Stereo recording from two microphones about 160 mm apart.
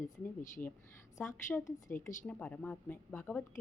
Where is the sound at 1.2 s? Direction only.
10° left (ahead or behind).